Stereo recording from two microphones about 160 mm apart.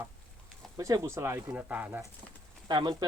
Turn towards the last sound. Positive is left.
turn(degrees=-30)  # may be behind; listen again after turning